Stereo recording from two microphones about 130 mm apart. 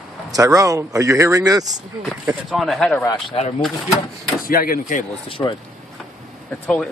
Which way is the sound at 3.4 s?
50° left (ahead or behind).